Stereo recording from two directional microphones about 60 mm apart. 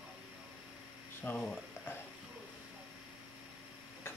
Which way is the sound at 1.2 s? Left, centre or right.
Left.